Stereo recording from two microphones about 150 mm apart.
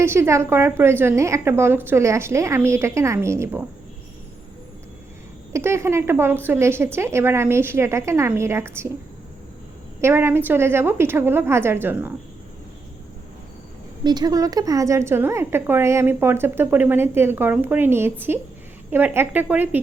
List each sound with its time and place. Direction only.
0.0 s a woman's voice: 15° right (ahead or behind)
5.5 s a woman's voice: 20° right (ahead or behind)
10.0 s a woman's voice: 15° right (ahead or behind)
14.0 s a woman's voice: 30° right (ahead or behind); by 19.8 s 10° right (ahead or behind)